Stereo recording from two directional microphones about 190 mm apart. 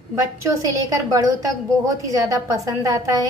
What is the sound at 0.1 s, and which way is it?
A woman's voice, 15° right (ahead or behind).